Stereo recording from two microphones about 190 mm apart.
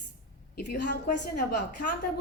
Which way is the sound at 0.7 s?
50° left (ahead or behind).